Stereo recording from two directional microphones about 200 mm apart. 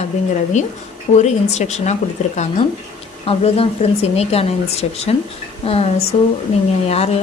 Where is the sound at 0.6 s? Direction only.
35° left (ahead or behind).